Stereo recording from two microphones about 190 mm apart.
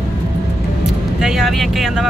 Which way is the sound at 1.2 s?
Centre (ahead or behind).